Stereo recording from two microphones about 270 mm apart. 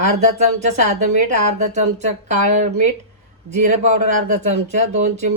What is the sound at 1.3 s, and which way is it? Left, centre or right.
Speech, right.